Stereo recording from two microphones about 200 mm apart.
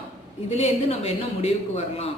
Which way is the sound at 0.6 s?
30° left (ahead or behind).